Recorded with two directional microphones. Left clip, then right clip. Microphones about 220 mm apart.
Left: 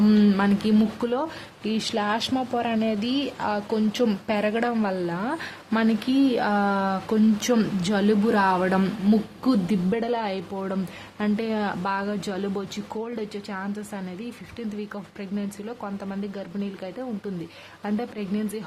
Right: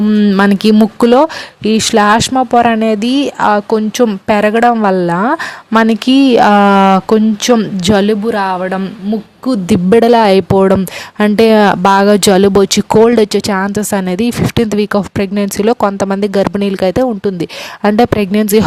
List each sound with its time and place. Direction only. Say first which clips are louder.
0.0 s a sound: right 9 dB; 30° right (ahead or behind)
0.3 s speech: right 14 dB; 45° right (ahead or behind)
9.5 s speech: right 15 dB; 45° right (ahead or behind)